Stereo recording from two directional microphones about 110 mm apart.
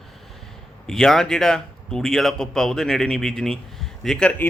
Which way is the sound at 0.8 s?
5° left (ahead or behind).